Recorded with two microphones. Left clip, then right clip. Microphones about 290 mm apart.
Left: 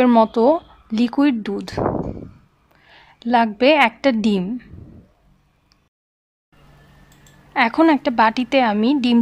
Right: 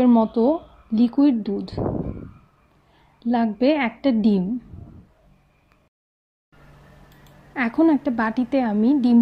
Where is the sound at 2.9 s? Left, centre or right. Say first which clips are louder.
Left 7 dB; left.